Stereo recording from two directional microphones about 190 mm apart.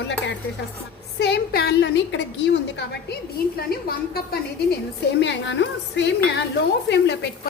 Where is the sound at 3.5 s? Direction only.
55° left (ahead or behind).